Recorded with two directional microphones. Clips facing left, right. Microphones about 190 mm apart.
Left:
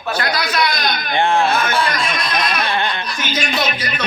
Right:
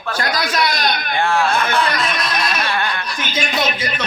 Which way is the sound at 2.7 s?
20° left (ahead or behind).